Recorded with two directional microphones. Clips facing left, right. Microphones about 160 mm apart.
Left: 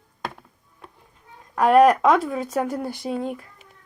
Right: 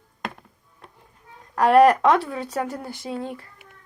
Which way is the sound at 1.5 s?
Centre (ahead or behind).